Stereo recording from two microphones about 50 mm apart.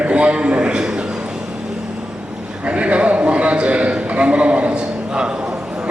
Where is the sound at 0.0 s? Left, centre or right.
Right.